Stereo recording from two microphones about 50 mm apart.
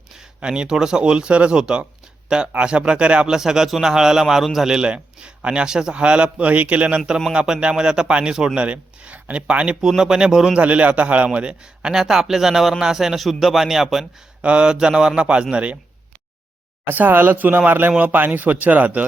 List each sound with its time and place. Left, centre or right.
0.2 s a man's voice: centre
3.2 s a man's voice: centre
4.9 s a man's voice: right
10.6 s speech: right
11.3 s a man's voice: centre
14.4 s speech: right
16.8 s speech: right